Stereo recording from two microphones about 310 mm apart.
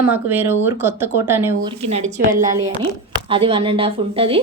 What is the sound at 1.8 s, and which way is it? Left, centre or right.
A woman's voice, right.